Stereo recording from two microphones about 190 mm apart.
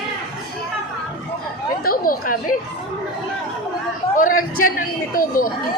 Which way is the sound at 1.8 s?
50° left (ahead or behind).